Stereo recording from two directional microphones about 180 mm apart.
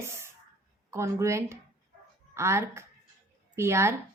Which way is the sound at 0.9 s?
15° right (ahead or behind).